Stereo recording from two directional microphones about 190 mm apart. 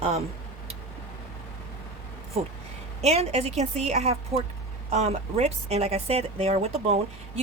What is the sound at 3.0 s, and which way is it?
A woman's voice, 35° right (ahead or behind).